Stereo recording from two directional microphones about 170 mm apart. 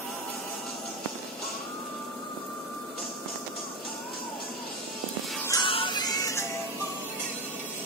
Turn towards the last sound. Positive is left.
turn(degrees=20)  # may be behind; listen again after turning